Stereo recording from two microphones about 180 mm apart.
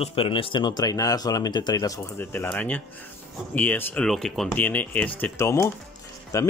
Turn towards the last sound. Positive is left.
turn(degrees=20)  # may be behind; listen again after turning